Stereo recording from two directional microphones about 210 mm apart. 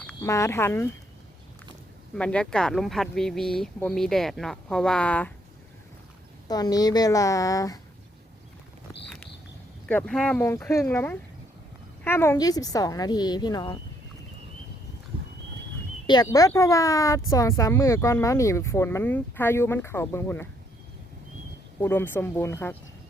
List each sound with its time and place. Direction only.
0.1 s speech: 15° left (ahead or behind)
2.1 s speech: 5° left (ahead or behind)
6.5 s speech: 20° left (ahead or behind)
9.0 s a sound: 5° left (ahead or behind)
9.8 s speech: 5° left (ahead or behind); by 13.7 s 20° left (ahead or behind)
15.1 s horse: 25° right (ahead or behind)
16.0 s speech: 20° left (ahead or behind)
21.8 s speech: 10° left (ahead or behind)